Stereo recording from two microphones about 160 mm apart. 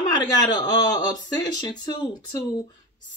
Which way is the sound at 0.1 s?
25° left (ahead or behind).